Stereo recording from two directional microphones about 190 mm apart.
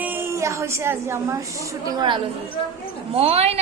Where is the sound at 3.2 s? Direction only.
30° right (ahead or behind).